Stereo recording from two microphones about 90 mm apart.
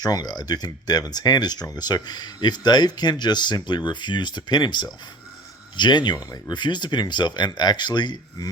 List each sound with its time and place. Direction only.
0.0 s speech: 50° left (ahead or behind)